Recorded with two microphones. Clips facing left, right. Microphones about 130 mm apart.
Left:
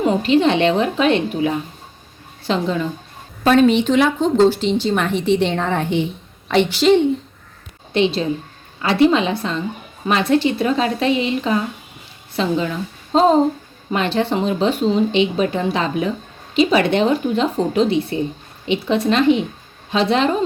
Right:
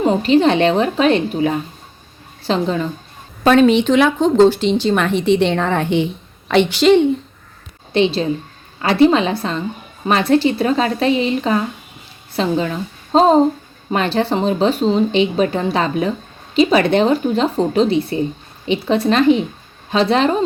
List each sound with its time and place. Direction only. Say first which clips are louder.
0.0 s speech: right 2 dB; 35° right (ahead or behind)
3.4 s a woman's voice: right 2 dB; 90° right; by 7.0 s 70° right (ahead or behind)
7.9 s a woman's voice: right 2 dB; 30° right (ahead or behind)